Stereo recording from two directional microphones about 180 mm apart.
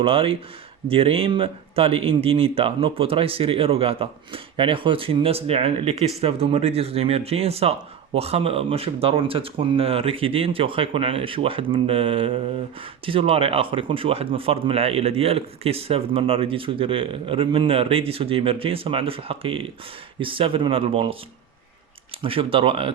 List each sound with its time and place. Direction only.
0.0 s speech: 30° right (ahead or behind)
22.2 s speech: 30° right (ahead or behind)